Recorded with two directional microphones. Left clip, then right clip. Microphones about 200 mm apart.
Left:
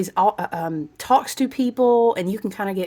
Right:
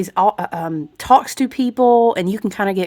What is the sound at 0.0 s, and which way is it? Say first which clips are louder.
A woman's voice: right 3 dB; 15° right (ahead or behind).